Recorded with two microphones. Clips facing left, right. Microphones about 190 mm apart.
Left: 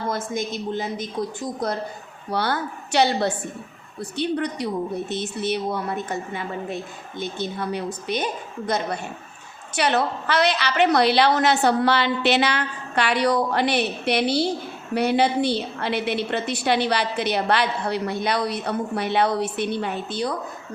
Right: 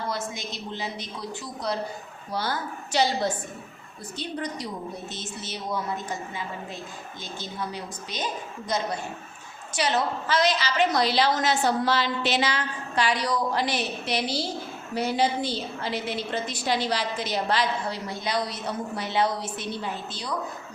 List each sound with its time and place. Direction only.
0.1 s a woman's voice: 50° left (ahead or behind)
2.3 s a woman's voice: 65° left (ahead or behind)